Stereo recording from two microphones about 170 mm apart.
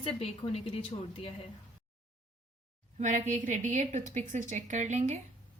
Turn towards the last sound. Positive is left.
turn(degrees=-45)  # may be behind; listen again after turning